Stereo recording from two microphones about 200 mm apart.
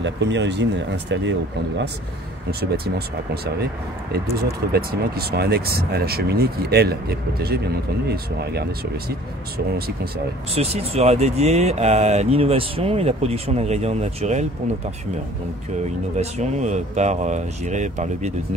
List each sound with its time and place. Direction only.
0.0 s speech: 65° right (ahead or behind)
4.1 s speech: 50° right (ahead or behind)
9.8 s speech: 50° right (ahead or behind)
10.5 s speech: 30° right (ahead or behind)
16.2 s speech: 35° right (ahead or behind)